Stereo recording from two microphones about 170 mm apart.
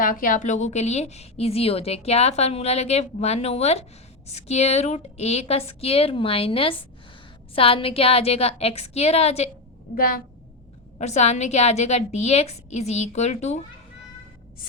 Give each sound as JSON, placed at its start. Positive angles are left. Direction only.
{"t": 0.0, "sound": "a woman's voice", "side_deg": 55}
{"t": 9.9, "sound": "a woman's voice", "side_deg": 55}
{"t": 10.9, "sound": "a woman's voice", "side_deg": 40}